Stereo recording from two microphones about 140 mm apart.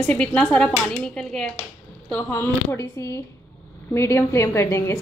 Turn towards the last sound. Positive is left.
turn(degrees=20)  # may be behind; listen again after turning